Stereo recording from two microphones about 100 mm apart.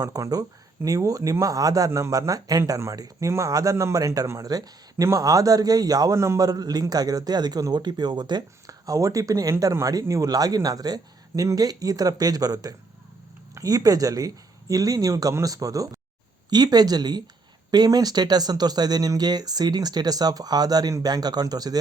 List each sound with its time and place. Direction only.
0.0 s a man's voice: 35° right (ahead or behind)